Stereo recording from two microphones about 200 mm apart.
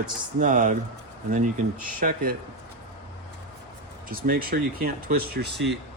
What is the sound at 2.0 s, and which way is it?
Speech, 45° right (ahead or behind).